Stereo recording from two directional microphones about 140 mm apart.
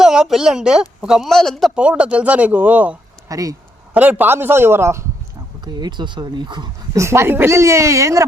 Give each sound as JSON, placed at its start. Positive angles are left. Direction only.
{"t": 0.0, "sound": "a woman's voice", "side_deg": -5}
{"t": 3.2, "sound": "speech", "side_deg": -25}
{"t": 3.9, "sound": "a man's voice", "side_deg": -10}
{"t": 5.6, "sound": "speech", "side_deg": -30}
{"t": 7.0, "sound": "speech", "side_deg": -20}